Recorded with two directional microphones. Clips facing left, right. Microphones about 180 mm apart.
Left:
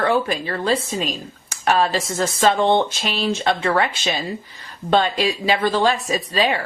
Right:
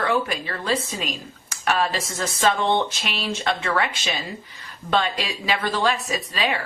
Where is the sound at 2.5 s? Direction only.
50° left (ahead or behind).